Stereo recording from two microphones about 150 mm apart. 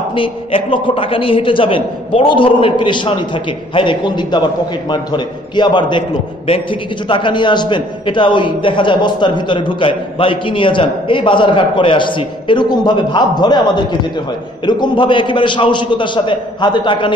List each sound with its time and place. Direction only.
0.1 s a man's voice: 35° left (ahead or behind)
14.7 s a man's voice: 30° left (ahead or behind)